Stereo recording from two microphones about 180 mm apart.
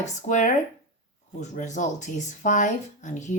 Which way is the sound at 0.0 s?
45° left (ahead or behind).